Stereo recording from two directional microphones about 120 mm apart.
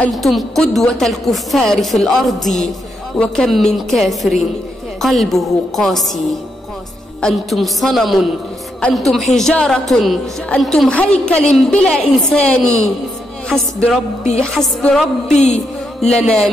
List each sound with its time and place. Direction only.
0.1 s a woman's voice: centre (ahead or behind)
7.2 s a woman's voice: 5° left (ahead or behind)
15.3 s music: 65° left (ahead or behind)
16.2 s a woman's voice: 5° left (ahead or behind)